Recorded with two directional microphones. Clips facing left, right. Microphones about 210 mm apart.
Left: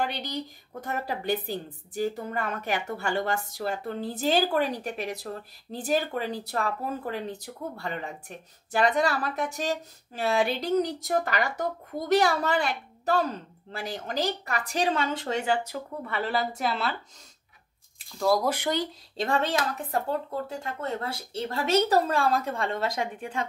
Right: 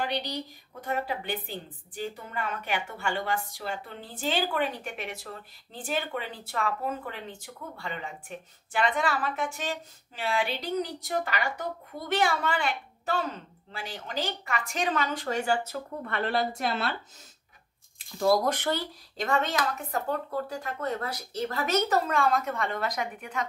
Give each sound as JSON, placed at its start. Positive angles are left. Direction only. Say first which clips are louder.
{"t": 0.0, "sound": "a woman's voice", "louder": "left 1 dB", "side_deg": 50}
{"t": 17.9, "sound": "speech", "louder": "right 1 dB", "side_deg": 0}
{"t": 18.5, "sound": "speech", "louder": "left 2 dB", "side_deg": 15}
{"t": 19.1, "sound": "speech", "louder": "left 1 dB", "side_deg": 30}